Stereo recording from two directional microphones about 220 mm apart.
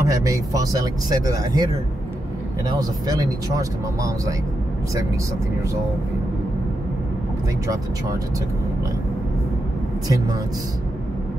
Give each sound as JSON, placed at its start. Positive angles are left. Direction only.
{"t": 0.0, "sound": "speech", "side_deg": -15}
{"t": 2.7, "sound": "speech", "side_deg": -15}